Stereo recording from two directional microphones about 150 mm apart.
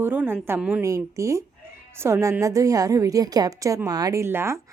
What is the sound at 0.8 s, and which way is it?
Speech, 20° right (ahead or behind).